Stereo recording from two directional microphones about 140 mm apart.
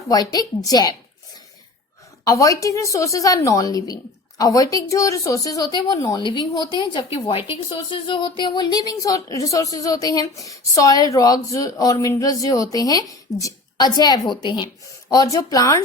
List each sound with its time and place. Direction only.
0.1 s speech: 30° left (ahead or behind)
2.2 s a woman's voice: 25° left (ahead or behind)